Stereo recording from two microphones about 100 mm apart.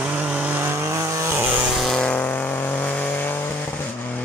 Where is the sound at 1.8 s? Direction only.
5° left (ahead or behind).